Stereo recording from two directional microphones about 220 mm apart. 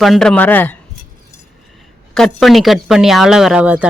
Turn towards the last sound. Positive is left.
turn(degrees=-5)  # may be behind; listen again after turning